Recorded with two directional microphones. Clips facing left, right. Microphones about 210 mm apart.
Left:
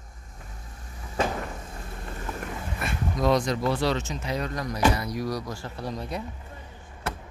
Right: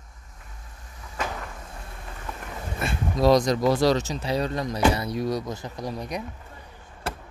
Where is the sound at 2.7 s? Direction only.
30° right (ahead or behind).